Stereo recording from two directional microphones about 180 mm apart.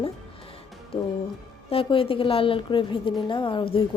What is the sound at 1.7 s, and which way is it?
A woman's voice, 30° left (ahead or behind).